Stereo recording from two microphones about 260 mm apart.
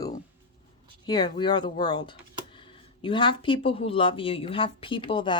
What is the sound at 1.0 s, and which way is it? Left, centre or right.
Speech, centre.